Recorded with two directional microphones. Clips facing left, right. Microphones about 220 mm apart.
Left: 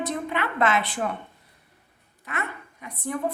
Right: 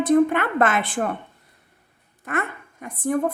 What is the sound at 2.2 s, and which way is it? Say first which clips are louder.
Speech: right 6 dB; 50° right (ahead or behind).